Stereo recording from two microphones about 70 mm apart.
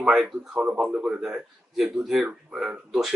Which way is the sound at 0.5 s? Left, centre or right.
Centre.